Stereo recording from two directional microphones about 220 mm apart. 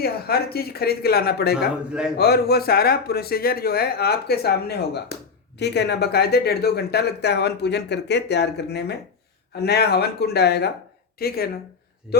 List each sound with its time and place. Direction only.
0.0 s speech: 45° left (ahead or behind)
1.9 s a man's voice: 5° right (ahead or behind)
2.1 s speech: 45° left (ahead or behind)
12.1 s a man's voice: 5° right (ahead or behind)